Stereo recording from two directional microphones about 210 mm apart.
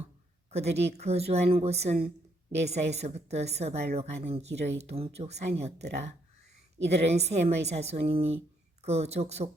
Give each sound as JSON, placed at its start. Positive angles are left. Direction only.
{"t": 0.5, "sound": "a woman's voice", "side_deg": -30}